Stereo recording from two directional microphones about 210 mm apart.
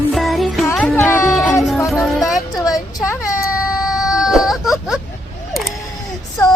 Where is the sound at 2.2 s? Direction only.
15° left (ahead or behind).